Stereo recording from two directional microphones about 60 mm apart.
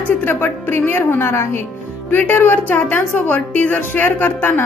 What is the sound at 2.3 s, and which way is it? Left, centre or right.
Speech, left.